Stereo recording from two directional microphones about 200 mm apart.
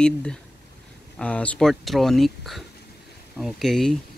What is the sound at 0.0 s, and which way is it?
Speech, 5° left (ahead or behind).